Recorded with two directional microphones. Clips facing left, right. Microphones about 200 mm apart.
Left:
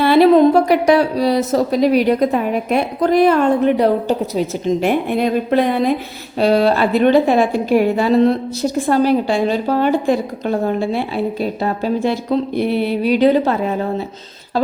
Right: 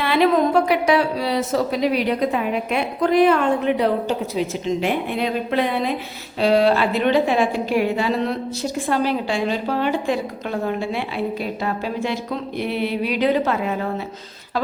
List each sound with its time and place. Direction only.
0.0 s a woman's voice: 35° left (ahead or behind)